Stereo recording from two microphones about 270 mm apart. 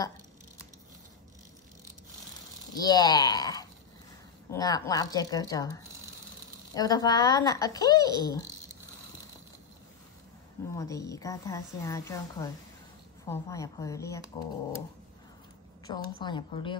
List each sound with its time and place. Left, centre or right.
2.7 s a woman's voice: centre
10.7 s a woman's voice: centre
15.9 s a woman's voice: centre